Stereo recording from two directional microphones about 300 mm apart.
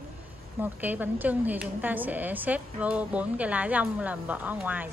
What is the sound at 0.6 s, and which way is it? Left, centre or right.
A woman's voice, centre.